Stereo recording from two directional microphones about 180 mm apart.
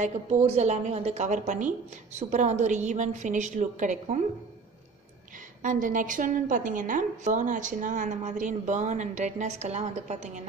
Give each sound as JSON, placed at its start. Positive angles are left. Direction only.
{"t": 0.0, "sound": "a woman's voice", "side_deg": -35}
{"t": 5.6, "sound": "a woman's voice", "side_deg": -45}